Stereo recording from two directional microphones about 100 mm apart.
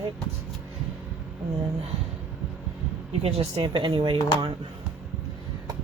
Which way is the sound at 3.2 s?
90° right.